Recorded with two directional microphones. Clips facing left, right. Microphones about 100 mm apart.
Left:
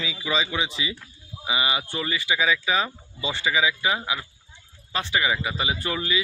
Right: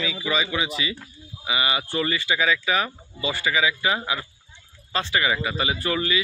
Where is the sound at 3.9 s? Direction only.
5° left (ahead or behind).